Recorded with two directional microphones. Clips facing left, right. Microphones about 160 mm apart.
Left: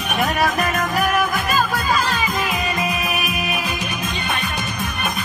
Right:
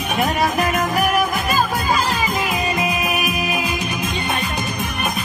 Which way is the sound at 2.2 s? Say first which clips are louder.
Right 1 dB; 15° right (ahead or behind).